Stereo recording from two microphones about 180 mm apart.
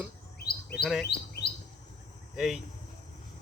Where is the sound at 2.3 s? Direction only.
Centre (ahead or behind).